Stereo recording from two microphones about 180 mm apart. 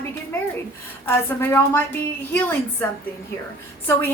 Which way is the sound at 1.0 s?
10° left (ahead or behind).